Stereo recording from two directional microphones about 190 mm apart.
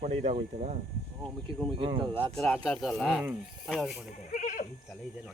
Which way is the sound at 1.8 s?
30° right (ahead or behind).